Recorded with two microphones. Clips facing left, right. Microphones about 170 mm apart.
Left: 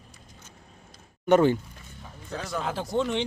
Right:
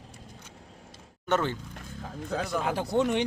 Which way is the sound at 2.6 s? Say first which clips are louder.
Right 1 dB; 10° right (ahead or behind).